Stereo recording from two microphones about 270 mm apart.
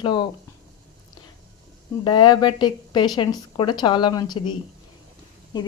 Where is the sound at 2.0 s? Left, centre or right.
Centre.